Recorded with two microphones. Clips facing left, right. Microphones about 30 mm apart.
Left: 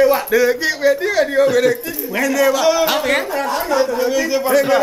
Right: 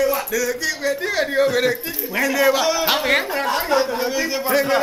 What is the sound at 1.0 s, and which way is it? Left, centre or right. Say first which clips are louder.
Speech: left 4 dB; centre.